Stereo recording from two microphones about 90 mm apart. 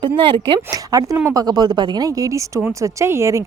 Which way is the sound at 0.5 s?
40° right (ahead or behind).